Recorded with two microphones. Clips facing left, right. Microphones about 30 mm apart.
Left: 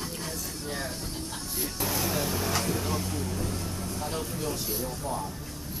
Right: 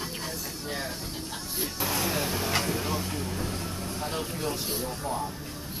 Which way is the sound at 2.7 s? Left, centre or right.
Centre.